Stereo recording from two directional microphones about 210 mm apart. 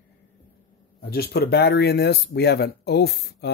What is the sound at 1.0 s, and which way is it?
Speech, 50° left (ahead or behind).